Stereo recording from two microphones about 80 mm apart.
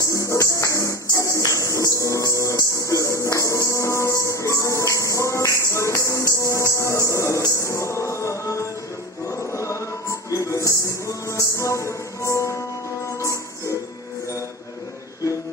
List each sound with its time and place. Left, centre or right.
0.0 s music: left
10.3 s music: left